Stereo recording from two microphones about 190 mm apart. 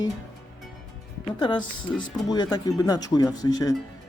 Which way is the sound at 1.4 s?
25° left (ahead or behind).